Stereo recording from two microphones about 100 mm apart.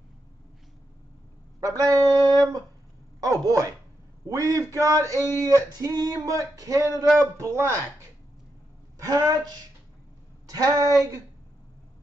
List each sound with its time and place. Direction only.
1.8 s a sound: 35° right (ahead or behind)
4.3 s male singing: 35° right (ahead or behind)
7.2 s a man's voice: 30° right (ahead or behind)
8.9 s male singing: 35° right (ahead or behind)